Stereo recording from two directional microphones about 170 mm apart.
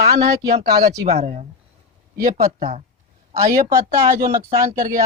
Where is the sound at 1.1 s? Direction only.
45° right (ahead or behind).